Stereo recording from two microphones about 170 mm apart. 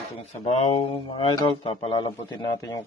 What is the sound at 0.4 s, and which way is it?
A man's voice, 35° left (ahead or behind).